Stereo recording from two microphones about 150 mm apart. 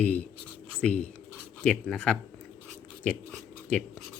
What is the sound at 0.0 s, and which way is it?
Speech, 10° left (ahead or behind).